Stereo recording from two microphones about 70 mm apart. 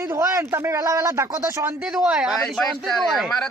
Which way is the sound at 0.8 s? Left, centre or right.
Right.